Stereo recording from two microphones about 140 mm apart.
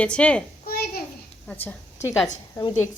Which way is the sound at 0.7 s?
90° left.